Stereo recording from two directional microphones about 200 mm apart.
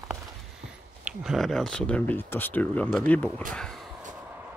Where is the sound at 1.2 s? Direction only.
Centre (ahead or behind).